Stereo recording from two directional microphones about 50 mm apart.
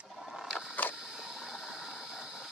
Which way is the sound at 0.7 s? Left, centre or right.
Left.